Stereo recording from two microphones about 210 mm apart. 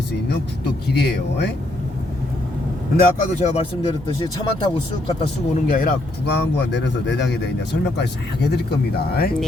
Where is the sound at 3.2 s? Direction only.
30° left (ahead or behind).